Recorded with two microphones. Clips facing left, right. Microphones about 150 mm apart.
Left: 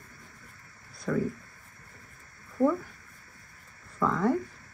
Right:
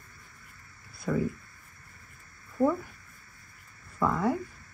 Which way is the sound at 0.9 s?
10° right (ahead or behind).